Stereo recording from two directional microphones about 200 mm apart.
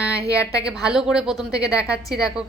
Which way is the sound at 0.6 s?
5° right (ahead or behind).